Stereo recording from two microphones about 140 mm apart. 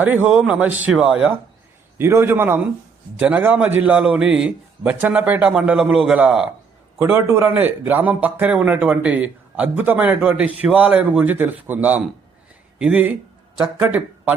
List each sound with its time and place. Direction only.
0.0 s a man's voice: 10° right (ahead or behind)
2.0 s speech: 15° right (ahead or behind)
7.0 s speech: 20° right (ahead or behind)